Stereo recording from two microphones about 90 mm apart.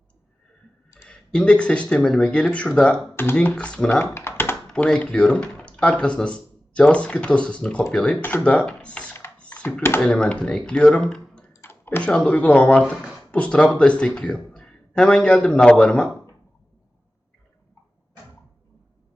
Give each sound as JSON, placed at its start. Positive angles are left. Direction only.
{"t": 1.0, "sound": "speech", "side_deg": 10}
{"t": 4.0, "sound": "typing", "side_deg": 30}
{"t": 4.7, "sound": "speech", "side_deg": 10}
{"t": 9.4, "sound": "a sound", "side_deg": 15}
{"t": 10.0, "sound": "speech", "side_deg": 10}
{"t": 11.5, "sound": "typing", "side_deg": 30}
{"t": 11.9, "sound": "speech", "side_deg": 20}